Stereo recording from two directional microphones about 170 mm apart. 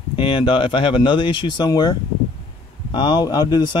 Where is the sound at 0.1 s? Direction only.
30° left (ahead or behind).